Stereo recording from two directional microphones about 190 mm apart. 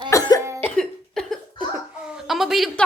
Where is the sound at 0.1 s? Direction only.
20° left (ahead or behind).